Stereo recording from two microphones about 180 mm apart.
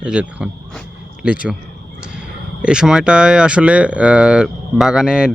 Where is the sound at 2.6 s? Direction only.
5° right (ahead or behind).